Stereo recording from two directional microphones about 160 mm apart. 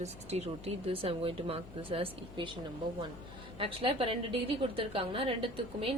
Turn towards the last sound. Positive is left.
turn(degrees=-35)  # may be behind; listen again after turning